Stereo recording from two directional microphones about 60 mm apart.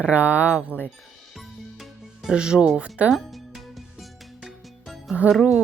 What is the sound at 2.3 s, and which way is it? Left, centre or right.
Speech, centre.